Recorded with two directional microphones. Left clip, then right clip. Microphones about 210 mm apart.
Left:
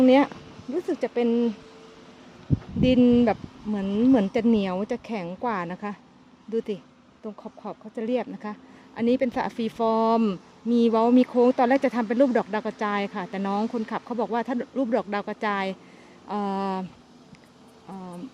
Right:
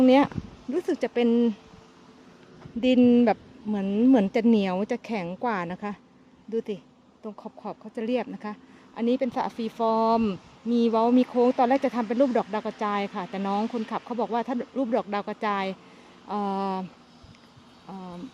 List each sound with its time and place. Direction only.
0.0 s speech: 5° right (ahead or behind)
2.8 s a woman's voice: 10° right (ahead or behind)
17.9 s a woman's voice: 5° right (ahead or behind)